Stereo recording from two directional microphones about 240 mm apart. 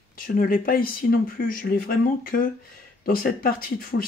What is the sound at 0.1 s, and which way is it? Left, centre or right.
Speech, left.